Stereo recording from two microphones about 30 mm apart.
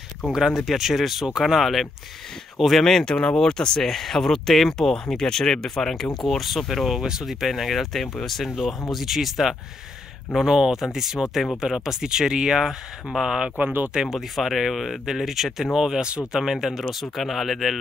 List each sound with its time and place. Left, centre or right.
0.5 s speech: centre
2.8 s speech: centre
3.8 s speech: centre
4.9 s speech: left
6.2 s speech: centre
7.0 s speech: centre
7.2 s speech: centre
13.6 s speech: right
14.1 s speech: centre
15.0 s speech: centre
16.0 s speech: right
16.3 s speech: centre